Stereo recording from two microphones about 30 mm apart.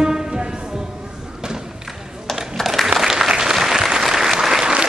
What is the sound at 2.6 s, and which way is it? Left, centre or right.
Applause, centre.